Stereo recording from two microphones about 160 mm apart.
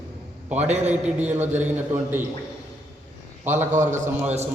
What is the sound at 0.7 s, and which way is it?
Speech, 45° right (ahead or behind).